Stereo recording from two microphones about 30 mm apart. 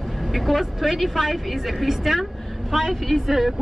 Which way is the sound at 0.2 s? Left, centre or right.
Centre.